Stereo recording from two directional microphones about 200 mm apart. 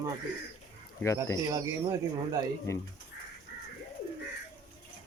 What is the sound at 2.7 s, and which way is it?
Speech, 15° left (ahead or behind).